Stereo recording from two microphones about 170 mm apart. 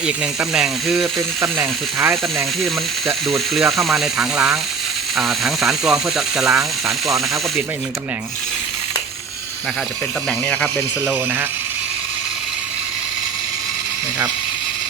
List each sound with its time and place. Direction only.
0.0 s speech: 5° right (ahead or behind)
1.4 s speech: 15° right (ahead or behind)
3.3 s speech: centre (ahead or behind)
10.5 s speech: 5° left (ahead or behind)
11.0 s speech: 15° right (ahead or behind)